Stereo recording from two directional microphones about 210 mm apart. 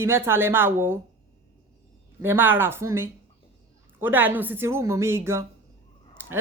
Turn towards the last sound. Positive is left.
turn(degrees=-10)  # may be behind; listen again after turning